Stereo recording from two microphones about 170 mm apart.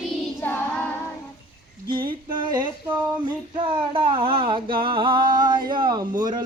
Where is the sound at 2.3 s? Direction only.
25° right (ahead or behind).